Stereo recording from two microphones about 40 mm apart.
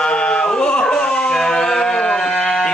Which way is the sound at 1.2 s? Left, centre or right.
Centre.